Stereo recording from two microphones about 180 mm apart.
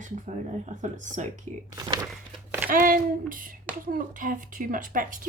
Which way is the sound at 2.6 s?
50° right (ahead or behind).